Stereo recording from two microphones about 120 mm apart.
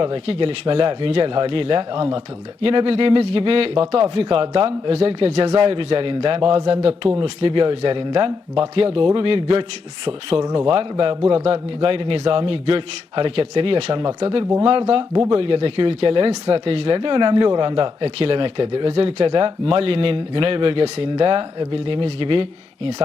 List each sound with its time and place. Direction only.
0.0 s speech: 50° right (ahead or behind)
18.0 s speech: 55° right (ahead or behind)